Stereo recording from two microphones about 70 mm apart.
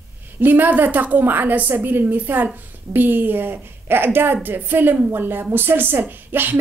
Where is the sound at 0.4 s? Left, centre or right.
Right.